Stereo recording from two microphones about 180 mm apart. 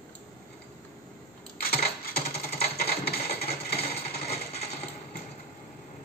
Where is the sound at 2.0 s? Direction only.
60° left (ahead or behind).